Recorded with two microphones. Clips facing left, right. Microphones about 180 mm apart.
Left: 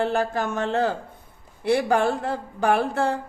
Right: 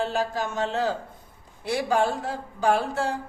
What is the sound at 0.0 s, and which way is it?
Speech, 55° left (ahead or behind).